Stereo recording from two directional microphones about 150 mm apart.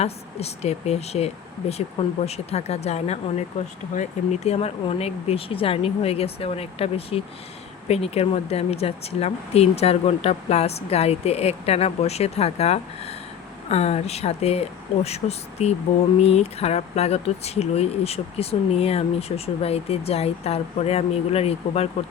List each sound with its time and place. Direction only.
0.0 s speech: 45° left (ahead or behind)